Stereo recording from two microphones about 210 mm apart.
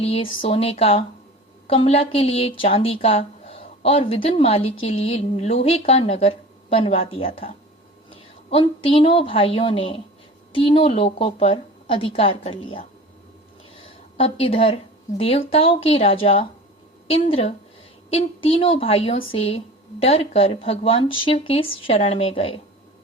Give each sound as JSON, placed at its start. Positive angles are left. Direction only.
{"t": 0.0, "sound": "a woman's voice", "side_deg": 25}
{"t": 14.2, "sound": "a woman's voice", "side_deg": 30}
{"t": 18.4, "sound": "a woman's voice", "side_deg": 25}